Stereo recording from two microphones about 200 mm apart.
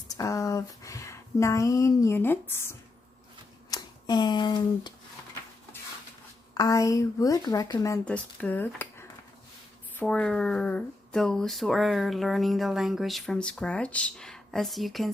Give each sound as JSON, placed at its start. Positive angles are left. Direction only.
{"t": 0.2, "sound": "speech", "side_deg": 15}
{"t": 6.5, "sound": "speech", "side_deg": 15}